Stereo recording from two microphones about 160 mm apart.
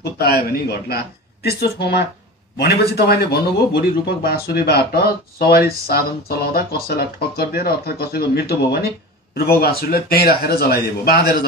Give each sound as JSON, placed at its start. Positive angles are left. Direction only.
{"t": 0.3, "sound": "a man's voice", "side_deg": 80}